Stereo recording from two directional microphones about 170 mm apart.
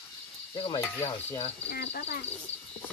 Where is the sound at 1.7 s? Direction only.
80° left.